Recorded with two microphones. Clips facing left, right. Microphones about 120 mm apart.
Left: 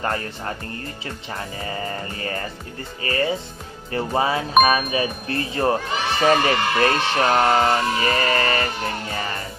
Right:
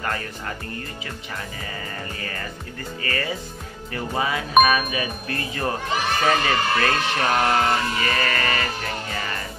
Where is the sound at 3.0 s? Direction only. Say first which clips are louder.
Left 6 dB; 25° left (ahead or behind).